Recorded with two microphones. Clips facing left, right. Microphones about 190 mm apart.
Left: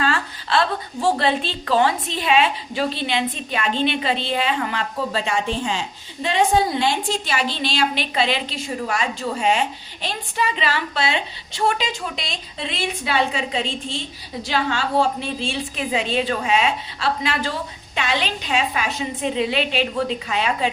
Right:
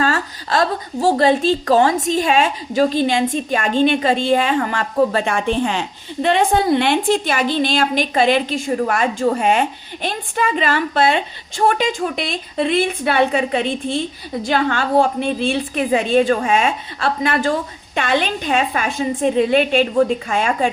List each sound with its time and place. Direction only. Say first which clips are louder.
0.0 s a woman's voice: right 4 dB; 40° right (ahead or behind)